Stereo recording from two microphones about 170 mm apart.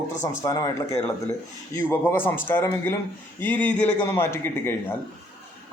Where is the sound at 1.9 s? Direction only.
15° left (ahead or behind).